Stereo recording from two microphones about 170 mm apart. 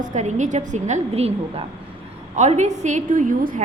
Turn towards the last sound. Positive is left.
turn(degrees=-50)  # may be behind; listen again after turning